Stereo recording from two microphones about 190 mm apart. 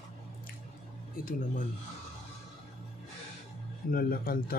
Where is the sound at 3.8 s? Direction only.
50° left (ahead or behind).